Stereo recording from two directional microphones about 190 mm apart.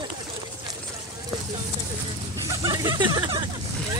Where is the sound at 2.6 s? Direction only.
20° right (ahead or behind).